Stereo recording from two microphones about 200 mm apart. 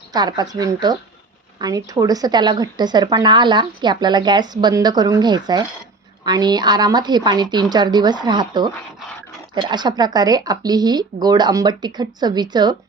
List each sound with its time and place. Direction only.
0.1 s speech: 20° right (ahead or behind)